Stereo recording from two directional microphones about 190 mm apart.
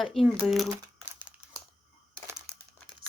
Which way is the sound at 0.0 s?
Centre (ahead or behind).